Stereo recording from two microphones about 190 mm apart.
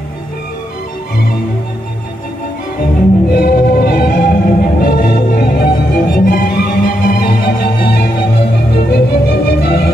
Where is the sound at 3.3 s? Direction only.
50° left (ahead or behind).